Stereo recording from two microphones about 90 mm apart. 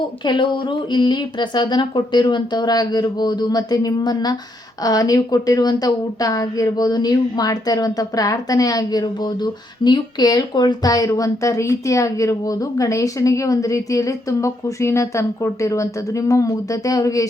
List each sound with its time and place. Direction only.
0.3 s a woman's voice: 65° left (ahead or behind); by 17.2 s 40° left (ahead or behind)